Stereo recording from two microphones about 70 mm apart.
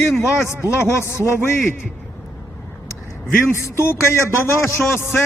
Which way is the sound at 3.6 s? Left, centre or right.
Left.